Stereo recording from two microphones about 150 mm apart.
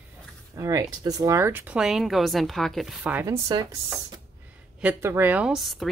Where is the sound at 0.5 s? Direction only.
25° right (ahead or behind); by 3.0 s centre (ahead or behind).